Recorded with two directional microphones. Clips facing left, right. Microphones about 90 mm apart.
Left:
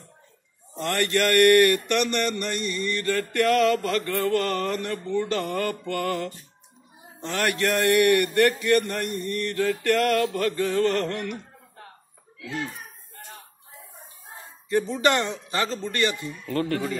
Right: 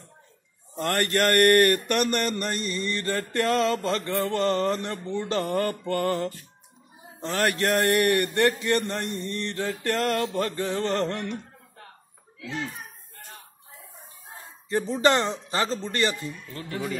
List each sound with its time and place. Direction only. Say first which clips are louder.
0.7 s a man's voice: even; 40° right (ahead or behind)
8.4 s a sound: left 3 dB; 30° right (ahead or behind)
14.7 s a man's voice: even; 35° right (ahead or behind)
16.4 s speech: left 14 dB; 75° left (ahead or behind)